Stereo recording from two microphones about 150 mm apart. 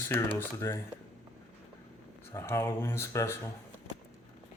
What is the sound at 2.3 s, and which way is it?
Speech, 15° left (ahead or behind).